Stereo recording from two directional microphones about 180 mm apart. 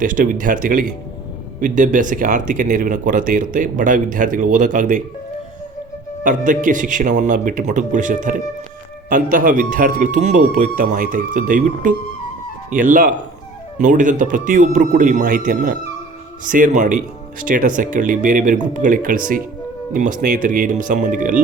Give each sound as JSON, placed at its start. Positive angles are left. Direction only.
{"t": 0.0, "sound": "speech", "side_deg": -50}
{"t": 6.2, "sound": "speech", "side_deg": -45}